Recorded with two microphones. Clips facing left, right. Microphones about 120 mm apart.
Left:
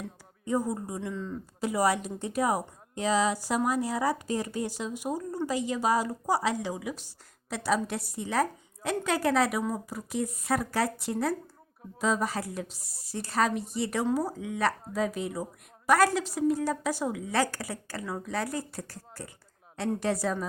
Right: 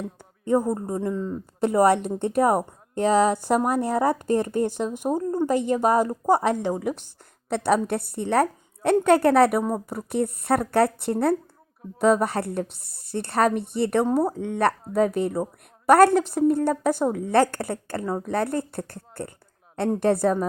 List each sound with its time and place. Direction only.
0.4 s a woman's voice: 55° right (ahead or behind)